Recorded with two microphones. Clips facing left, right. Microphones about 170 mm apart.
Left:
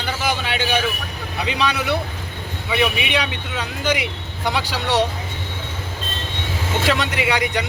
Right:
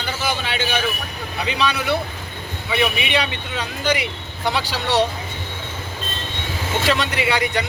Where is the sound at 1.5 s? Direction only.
20° left (ahead or behind).